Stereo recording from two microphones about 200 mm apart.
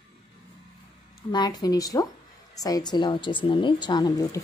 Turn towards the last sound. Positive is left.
turn(degrees=20)  # may be behind; listen again after turning